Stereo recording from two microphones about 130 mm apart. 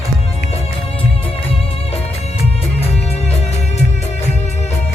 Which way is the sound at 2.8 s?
50° left (ahead or behind).